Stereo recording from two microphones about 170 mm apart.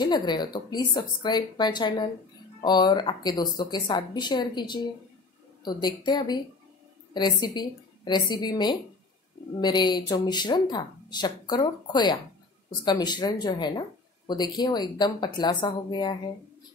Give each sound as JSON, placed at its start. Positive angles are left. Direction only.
{"t": 0.0, "sound": "speech", "side_deg": 25}